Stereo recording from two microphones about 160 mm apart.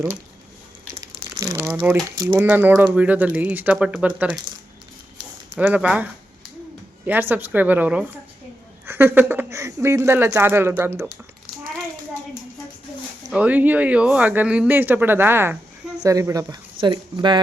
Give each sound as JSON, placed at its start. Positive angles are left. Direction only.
{"t": 1.0, "sound": "crumpling", "side_deg": -20}
{"t": 1.7, "sound": "speech", "side_deg": -5}
{"t": 2.1, "sound": "speech", "side_deg": -15}
{"t": 5.5, "sound": "speech", "side_deg": -10}
{"t": 13.3, "sound": "speech", "side_deg": -10}